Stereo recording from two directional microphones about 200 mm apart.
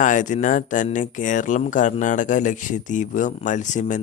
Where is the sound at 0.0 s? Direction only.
40° left (ahead or behind).